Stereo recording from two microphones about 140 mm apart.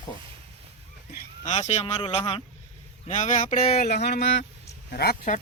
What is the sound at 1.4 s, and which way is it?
Speech, 55° left (ahead or behind).